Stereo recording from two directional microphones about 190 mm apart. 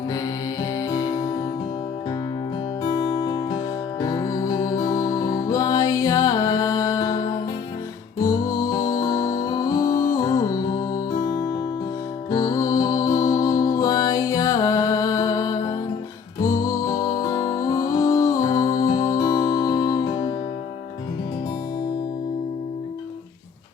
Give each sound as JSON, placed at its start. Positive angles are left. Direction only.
{"t": 0.8, "sound": "music", "side_deg": 20}
{"t": 4.0, "sound": "music", "side_deg": 20}
{"t": 8.7, "sound": "music", "side_deg": 20}
{"t": 12.3, "sound": "music", "side_deg": 20}